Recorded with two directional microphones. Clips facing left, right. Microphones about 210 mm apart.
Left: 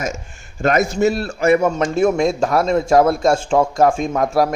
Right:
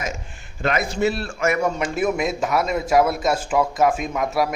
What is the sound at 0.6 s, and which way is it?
A man's voice, 45° left (ahead or behind).